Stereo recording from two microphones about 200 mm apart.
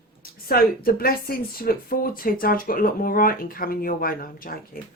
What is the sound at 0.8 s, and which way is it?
A woman's voice, 45° left (ahead or behind).